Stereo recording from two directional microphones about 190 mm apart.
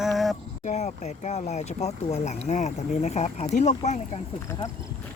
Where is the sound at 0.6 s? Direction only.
35° left (ahead or behind).